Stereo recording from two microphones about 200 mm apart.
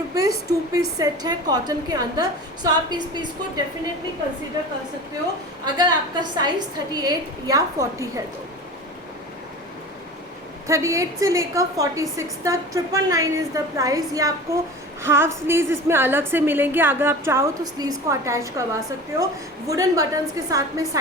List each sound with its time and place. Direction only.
0.2 s a woman's voice: 15° right (ahead or behind)
5.6 s a woman's voice: 20° right (ahead or behind)
10.7 s a woman's voice: 15° right (ahead or behind)